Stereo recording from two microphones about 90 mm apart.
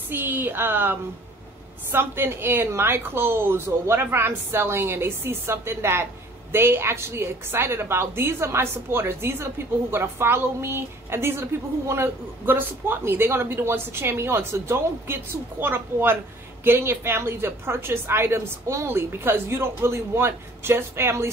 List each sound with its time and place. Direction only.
0.1 s a woman's voice: 20° right (ahead or behind)